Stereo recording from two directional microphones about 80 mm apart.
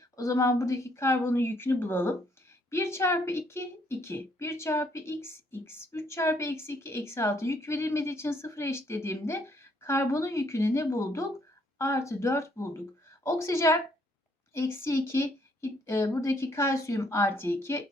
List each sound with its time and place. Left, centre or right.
0.2 s a woman's voice: left